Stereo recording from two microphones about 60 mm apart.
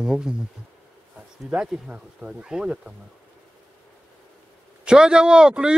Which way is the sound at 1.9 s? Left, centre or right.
Right.